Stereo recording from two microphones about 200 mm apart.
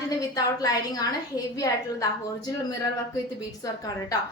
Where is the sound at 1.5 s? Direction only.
15° left (ahead or behind).